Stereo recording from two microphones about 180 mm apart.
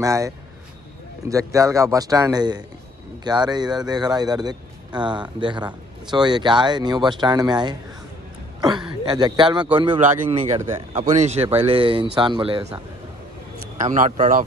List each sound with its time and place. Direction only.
0.0 s a man's voice: 15° right (ahead or behind)
1.3 s a man's voice: 15° right (ahead or behind)
13.7 s speech: 45° right (ahead or behind)